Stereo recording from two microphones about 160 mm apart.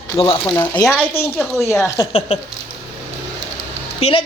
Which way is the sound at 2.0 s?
40° left (ahead or behind).